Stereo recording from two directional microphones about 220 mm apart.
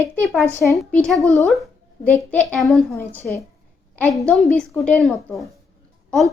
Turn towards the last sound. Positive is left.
turn(degrees=0)  # may be behind; listen again after turning